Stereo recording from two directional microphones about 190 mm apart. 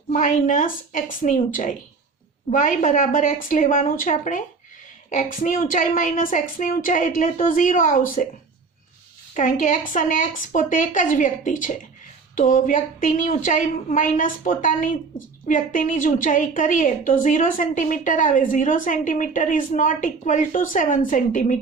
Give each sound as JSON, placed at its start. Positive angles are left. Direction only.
{"t": 0.1, "sound": "a woman's voice", "side_deg": 45}
{"t": 9.3, "sound": "a woman's voice", "side_deg": 45}